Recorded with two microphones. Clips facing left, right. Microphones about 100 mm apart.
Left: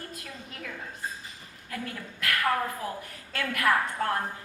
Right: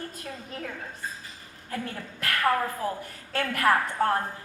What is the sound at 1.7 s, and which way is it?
A woman's voice, 35° right (ahead or behind).